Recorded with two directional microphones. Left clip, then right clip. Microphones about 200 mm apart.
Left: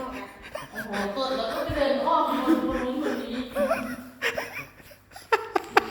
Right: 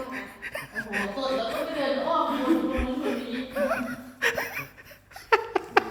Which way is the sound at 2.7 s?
5° right (ahead or behind).